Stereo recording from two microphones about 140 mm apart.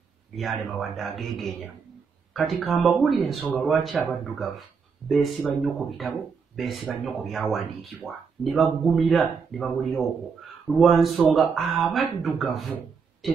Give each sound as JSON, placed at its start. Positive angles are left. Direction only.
{"t": 0.4, "sound": "speech", "side_deg": 0}
{"t": 5.0, "sound": "speech", "side_deg": 0}